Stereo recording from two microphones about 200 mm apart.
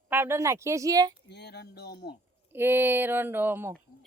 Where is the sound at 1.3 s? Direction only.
55° left (ahead or behind).